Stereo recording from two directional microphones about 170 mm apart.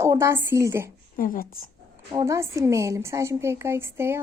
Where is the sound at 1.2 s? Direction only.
55° left (ahead or behind).